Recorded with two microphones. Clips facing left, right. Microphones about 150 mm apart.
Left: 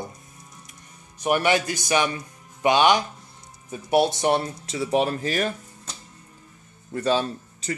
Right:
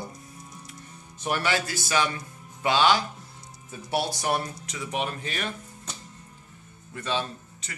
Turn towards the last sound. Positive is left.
turn(degrees=35)  # may be behind; listen again after turning